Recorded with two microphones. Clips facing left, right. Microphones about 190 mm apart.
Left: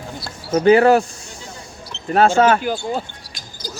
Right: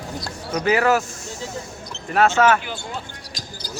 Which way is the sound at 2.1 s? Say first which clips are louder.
Left 3 dB; 30° left (ahead or behind).